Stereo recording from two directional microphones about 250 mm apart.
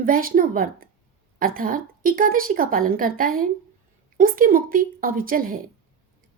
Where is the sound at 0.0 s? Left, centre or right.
Right.